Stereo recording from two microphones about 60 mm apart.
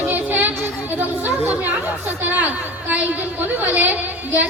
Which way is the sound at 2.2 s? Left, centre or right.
Right.